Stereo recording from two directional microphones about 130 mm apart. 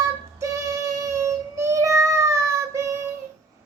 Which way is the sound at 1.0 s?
25° right (ahead or behind).